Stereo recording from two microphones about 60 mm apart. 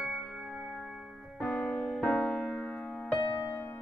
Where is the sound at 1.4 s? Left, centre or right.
Left.